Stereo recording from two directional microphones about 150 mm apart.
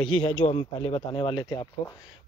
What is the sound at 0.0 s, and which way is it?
Speech, 35° left (ahead or behind).